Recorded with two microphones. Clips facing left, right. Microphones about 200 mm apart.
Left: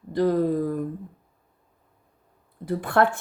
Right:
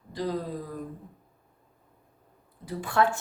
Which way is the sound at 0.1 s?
55° left (ahead or behind).